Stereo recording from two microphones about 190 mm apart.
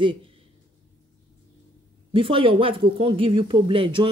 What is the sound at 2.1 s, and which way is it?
Speech, 30° right (ahead or behind).